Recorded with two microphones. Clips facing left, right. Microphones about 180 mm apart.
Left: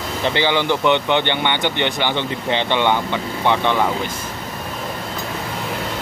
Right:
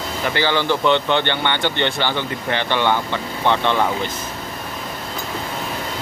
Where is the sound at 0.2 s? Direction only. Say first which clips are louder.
Left 1 dB; 20° left (ahead or behind).